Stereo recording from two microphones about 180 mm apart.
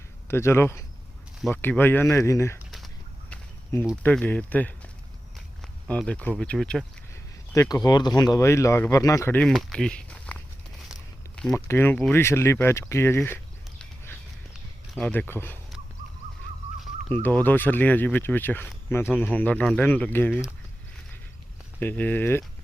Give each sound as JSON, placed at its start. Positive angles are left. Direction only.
{"t": 0.3, "sound": "speech", "side_deg": 15}
{"t": 2.7, "sound": "a sound", "side_deg": 5}
{"t": 4.0, "sound": "speech", "side_deg": 10}
{"t": 7.5, "sound": "speech", "side_deg": 20}
{"t": 9.5, "sound": "speech", "side_deg": 0}
{"t": 11.5, "sound": "speech", "side_deg": 15}
{"t": 17.2, "sound": "speech", "side_deg": 10}
{"t": 21.8, "sound": "speech", "side_deg": 10}